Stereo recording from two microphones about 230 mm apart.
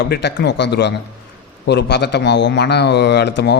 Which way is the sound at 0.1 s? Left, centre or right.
Left.